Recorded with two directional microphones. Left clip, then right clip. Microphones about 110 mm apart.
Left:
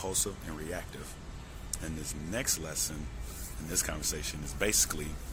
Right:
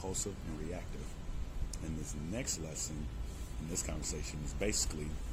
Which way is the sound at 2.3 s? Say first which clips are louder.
Left 7 dB; 15° right (ahead or behind).